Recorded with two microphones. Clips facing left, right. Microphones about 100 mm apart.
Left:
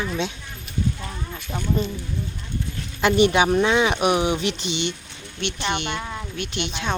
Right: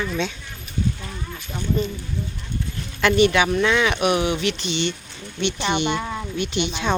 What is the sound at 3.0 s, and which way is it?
Speech, 20° left (ahead or behind).